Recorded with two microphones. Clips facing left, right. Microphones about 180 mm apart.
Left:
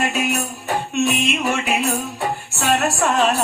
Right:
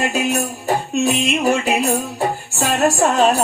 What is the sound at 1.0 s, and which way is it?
Music, 35° right (ahead or behind).